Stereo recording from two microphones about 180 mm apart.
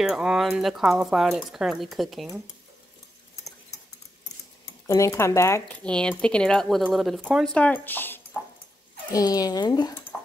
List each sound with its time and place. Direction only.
0.0 s speech: 5° right (ahead or behind)
4.8 s speech: 15° left (ahead or behind)
5.9 s speech: 5° left (ahead or behind); by 9.9 s 20° left (ahead or behind)